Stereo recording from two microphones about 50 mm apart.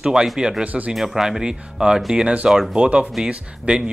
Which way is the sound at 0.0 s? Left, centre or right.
Centre.